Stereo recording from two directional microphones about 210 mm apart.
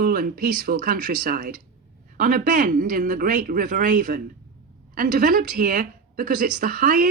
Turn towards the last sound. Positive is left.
turn(degrees=-45)  # may be behind; listen again after turning